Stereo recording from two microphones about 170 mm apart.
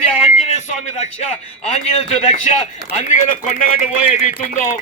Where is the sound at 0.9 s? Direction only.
45° left (ahead or behind).